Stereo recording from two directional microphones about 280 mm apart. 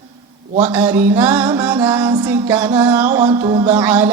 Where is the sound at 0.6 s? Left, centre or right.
Centre.